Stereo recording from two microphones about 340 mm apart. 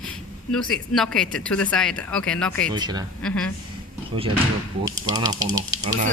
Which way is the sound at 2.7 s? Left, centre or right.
Centre.